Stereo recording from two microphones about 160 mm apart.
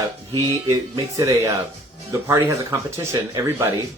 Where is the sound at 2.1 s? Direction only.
20° right (ahead or behind).